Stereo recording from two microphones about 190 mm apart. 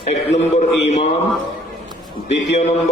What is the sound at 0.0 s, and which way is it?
Speech, 40° left (ahead or behind).